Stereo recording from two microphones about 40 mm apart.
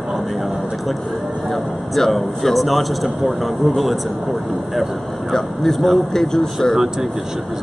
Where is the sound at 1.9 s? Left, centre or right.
Centre.